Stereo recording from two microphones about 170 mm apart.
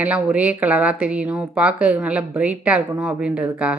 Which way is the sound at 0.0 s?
10° right (ahead or behind).